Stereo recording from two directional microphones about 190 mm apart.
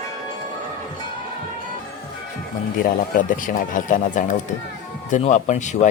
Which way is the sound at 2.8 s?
45° left (ahead or behind).